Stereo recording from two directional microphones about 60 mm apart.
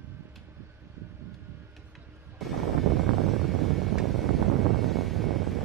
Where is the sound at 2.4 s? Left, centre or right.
Centre.